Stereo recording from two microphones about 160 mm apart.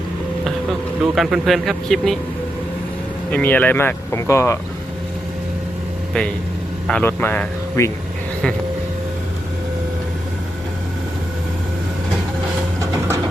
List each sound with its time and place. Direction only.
0.4 s speech: centre (ahead or behind)
3.3 s speech: 10° left (ahead or behind)
6.8 s speech: 10° left (ahead or behind)